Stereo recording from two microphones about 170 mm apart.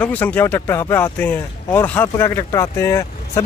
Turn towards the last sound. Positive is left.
turn(degrees=15)  # may be behind; listen again after turning